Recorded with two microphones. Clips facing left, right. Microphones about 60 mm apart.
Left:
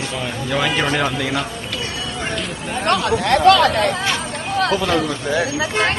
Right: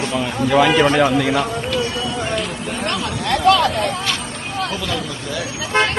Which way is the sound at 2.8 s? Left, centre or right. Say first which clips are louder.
Left 7 dB; left.